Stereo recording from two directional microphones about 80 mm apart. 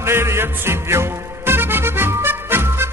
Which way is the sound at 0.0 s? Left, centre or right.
Right.